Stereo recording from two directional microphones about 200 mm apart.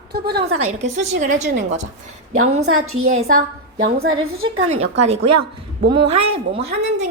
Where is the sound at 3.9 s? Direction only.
30° right (ahead or behind).